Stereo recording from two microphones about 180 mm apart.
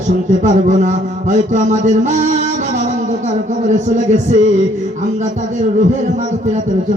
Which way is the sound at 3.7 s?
40° right (ahead or behind).